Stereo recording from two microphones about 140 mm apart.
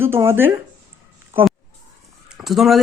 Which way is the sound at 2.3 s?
Centre (ahead or behind).